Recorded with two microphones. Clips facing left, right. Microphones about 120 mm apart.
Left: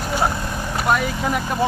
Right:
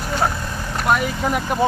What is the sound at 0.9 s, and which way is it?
Speech, centre (ahead or behind).